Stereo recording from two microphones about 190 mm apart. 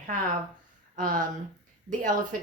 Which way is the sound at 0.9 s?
45° right (ahead or behind).